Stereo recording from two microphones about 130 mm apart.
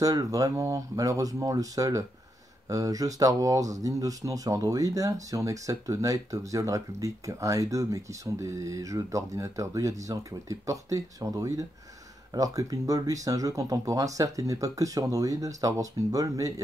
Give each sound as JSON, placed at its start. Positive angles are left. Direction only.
{"t": 0.0, "sound": "speech", "side_deg": -30}